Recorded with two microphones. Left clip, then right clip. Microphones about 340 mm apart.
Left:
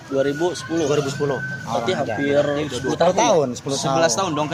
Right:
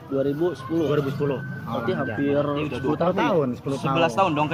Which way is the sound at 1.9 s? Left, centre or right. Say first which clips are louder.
Left 3 dB; left.